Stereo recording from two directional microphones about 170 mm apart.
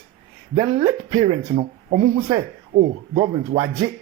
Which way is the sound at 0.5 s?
25° right (ahead or behind).